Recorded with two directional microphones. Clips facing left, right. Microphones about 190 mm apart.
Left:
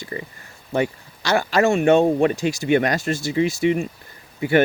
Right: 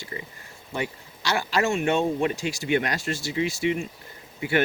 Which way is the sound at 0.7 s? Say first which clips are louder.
Left 8 dB; 50° left (ahead or behind).